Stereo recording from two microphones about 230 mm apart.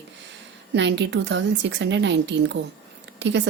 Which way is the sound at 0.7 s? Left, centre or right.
Right.